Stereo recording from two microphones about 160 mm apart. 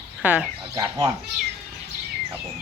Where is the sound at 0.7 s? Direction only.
25° right (ahead or behind).